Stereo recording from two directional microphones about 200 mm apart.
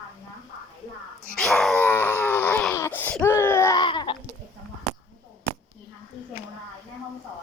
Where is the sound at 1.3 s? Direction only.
5° left (ahead or behind); by 4.1 s 25° left (ahead or behind).